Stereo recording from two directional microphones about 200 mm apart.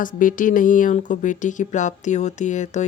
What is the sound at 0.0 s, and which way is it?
Speech, 40° left (ahead or behind).